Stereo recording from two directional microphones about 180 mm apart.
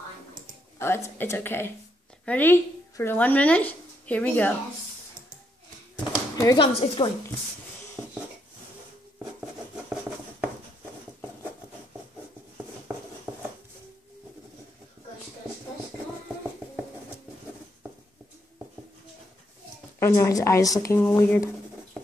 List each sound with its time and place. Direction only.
0.7 s speech: 15° left (ahead or behind)
6.3 s speech: 20° left (ahead or behind)
6.7 s speech: 35° left (ahead or behind)
20.0 s speech: 15° left (ahead or behind)